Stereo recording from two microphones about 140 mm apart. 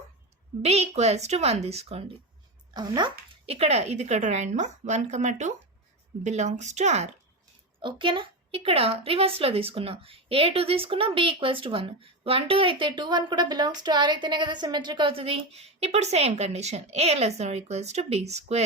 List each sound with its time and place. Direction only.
0.6 s a woman's voice: 50° right (ahead or behind)
2.7 s speech: 30° right (ahead or behind)
3.5 s a woman's voice: 50° right (ahead or behind)
7.8 s a woman's voice: 35° right (ahead or behind); by 18.6 s 50° right (ahead or behind)